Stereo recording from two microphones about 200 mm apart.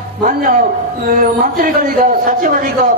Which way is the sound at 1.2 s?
45° right (ahead or behind).